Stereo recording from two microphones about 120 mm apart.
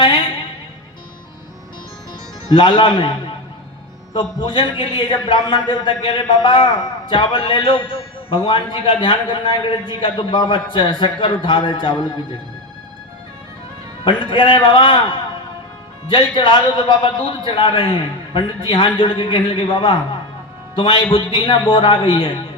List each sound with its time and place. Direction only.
0.0 s music: 45° left (ahead or behind)
2.5 s a man's voice: 45° left (ahead or behind)
4.4 s a man's voice: 45° left (ahead or behind)
14.0 s a man's voice: 45° left (ahead or behind)